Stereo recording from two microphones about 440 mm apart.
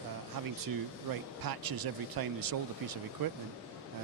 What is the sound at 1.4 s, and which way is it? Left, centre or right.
Speech, right.